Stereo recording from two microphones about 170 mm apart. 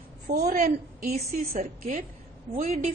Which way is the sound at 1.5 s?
40° right (ahead or behind).